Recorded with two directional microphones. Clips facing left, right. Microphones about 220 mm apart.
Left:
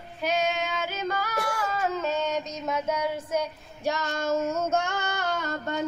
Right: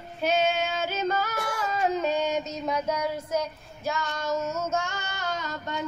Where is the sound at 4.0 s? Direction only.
45° left (ahead or behind).